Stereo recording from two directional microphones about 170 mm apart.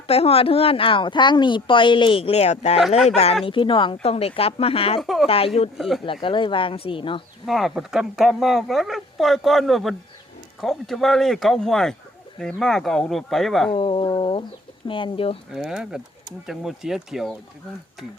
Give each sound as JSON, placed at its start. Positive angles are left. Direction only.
{"t": 0.1, "sound": "speech", "side_deg": 35}
{"t": 4.9, "sound": "speech", "side_deg": 0}
{"t": 6.1, "sound": "speech", "side_deg": 30}
{"t": 7.4, "sound": "speech", "side_deg": 0}
{"t": 13.7, "sound": "speech", "side_deg": 30}
{"t": 15.5, "sound": "speech", "side_deg": -5}